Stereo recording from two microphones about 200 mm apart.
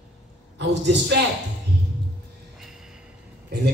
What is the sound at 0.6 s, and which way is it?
Speech, 60° right (ahead or behind).